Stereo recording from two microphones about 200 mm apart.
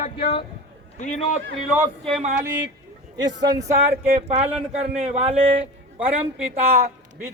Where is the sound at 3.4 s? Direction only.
20° right (ahead or behind).